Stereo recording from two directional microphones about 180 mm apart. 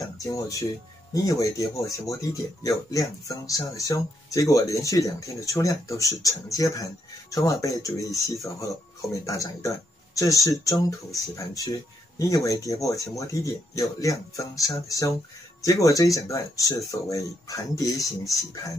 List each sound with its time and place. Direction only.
0.0 s speech: 20° left (ahead or behind)